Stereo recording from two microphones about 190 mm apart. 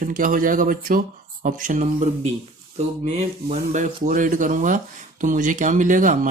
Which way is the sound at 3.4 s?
40° right (ahead or behind).